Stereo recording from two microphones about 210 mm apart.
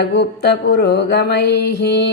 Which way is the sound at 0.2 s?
50° left (ahead or behind).